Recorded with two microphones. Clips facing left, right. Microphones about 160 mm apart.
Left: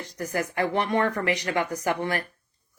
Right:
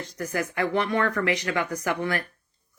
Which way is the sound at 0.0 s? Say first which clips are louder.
Even; 15° left (ahead or behind).